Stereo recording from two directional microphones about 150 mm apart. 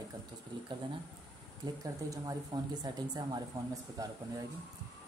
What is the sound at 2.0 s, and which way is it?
A woman's voice, 25° right (ahead or behind).